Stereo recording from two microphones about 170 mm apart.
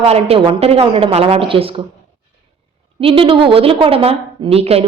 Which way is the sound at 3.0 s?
30° right (ahead or behind).